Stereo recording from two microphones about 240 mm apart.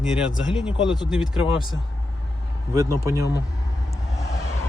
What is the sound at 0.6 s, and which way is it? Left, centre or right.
Speech, left.